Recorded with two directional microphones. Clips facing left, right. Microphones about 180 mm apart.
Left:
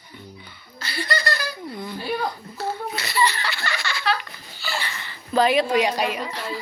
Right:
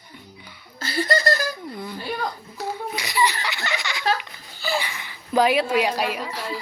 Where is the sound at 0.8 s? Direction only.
45° right (ahead or behind).